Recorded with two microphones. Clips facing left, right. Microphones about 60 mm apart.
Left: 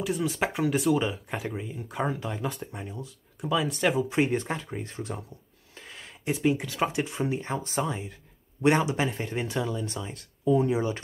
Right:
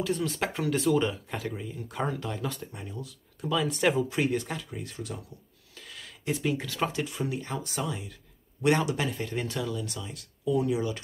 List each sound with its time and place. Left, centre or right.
0.0 s speech: centre
3.6 s speech: centre
4.1 s speech: left
5.8 s a sound: left
6.4 s speech: centre
7.0 s speech: left
8.6 s speech: left